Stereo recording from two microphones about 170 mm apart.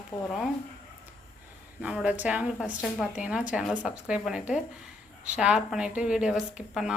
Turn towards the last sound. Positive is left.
turn(degrees=-5)  # may be behind; listen again after turning